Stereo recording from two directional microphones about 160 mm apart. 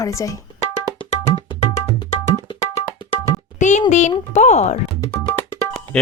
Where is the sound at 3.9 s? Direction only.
50° left (ahead or behind).